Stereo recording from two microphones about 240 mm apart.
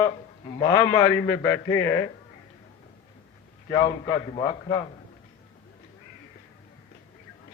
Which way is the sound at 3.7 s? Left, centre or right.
Centre.